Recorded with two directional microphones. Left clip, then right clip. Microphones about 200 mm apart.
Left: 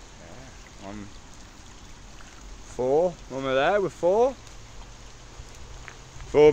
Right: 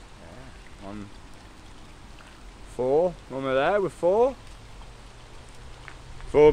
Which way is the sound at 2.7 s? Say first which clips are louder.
Even; centre (ahead or behind).